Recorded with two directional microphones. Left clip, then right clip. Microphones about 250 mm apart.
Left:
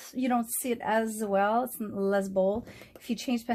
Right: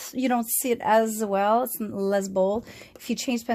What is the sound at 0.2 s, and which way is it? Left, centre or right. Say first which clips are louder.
A woman's voice: right 4 dB; right.